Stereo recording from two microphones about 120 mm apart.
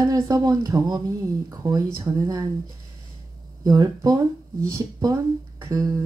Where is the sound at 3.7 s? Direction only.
30° right (ahead or behind).